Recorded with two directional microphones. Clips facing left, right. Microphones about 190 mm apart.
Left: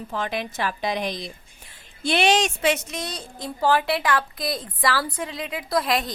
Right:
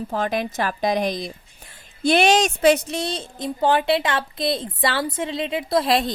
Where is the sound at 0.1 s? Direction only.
45° right (ahead or behind).